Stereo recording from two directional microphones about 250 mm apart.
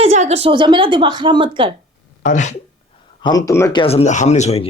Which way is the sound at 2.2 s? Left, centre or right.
Left.